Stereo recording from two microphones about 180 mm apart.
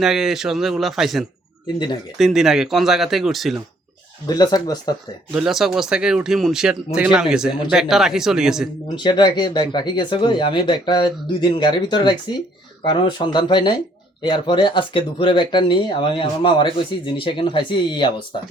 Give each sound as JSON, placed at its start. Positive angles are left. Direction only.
{"t": 0.0, "sound": "speech", "side_deg": 0}
{"t": 4.3, "sound": "speech", "side_deg": 20}
{"t": 5.3, "sound": "speech", "side_deg": 0}
{"t": 9.0, "sound": "speech", "side_deg": 25}